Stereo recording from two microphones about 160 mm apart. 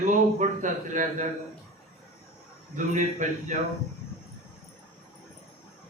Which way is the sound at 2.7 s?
50° right (ahead or behind).